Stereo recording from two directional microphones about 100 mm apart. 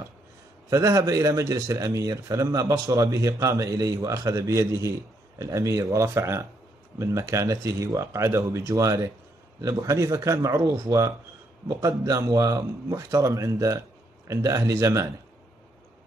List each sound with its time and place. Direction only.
0.7 s a man's voice: 35° right (ahead or behind)